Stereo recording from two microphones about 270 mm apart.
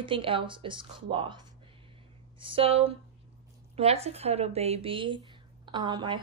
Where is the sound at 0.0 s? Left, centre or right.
Centre.